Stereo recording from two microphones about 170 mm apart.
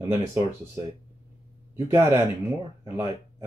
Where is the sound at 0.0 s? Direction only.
10° right (ahead or behind).